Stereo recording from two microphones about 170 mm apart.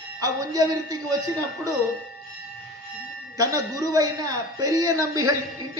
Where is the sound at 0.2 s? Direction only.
20° right (ahead or behind).